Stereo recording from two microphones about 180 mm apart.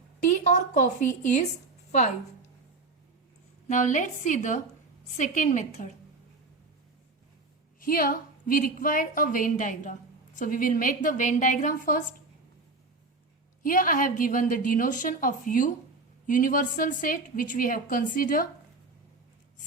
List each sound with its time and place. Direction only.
0.2 s a woman's voice: 45° left (ahead or behind)
3.7 s a woman's voice: 45° left (ahead or behind)
7.8 s a woman's voice: 55° left (ahead or behind)
13.6 s a woman's voice: 50° left (ahead or behind)